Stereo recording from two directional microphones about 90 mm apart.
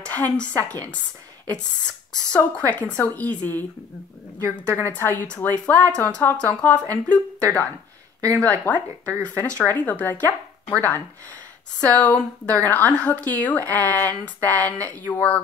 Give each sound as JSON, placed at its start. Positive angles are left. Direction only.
{"t": 0.0, "sound": "speech", "side_deg": 15}
{"t": 2.3, "sound": "speech", "side_deg": 15}
{"t": 4.6, "sound": "speech", "side_deg": 20}